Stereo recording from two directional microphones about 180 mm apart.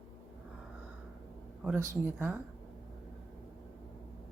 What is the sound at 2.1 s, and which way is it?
Speech, 5° right (ahead or behind).